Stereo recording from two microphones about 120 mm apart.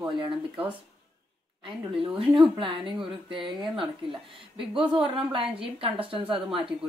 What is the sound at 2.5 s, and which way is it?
A woman's voice, 45° right (ahead or behind).